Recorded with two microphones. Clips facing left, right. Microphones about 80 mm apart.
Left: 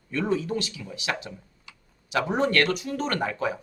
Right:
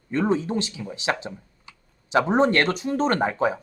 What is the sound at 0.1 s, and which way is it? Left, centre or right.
Speech, right.